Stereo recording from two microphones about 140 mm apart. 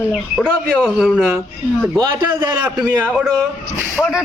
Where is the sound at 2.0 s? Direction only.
30° right (ahead or behind).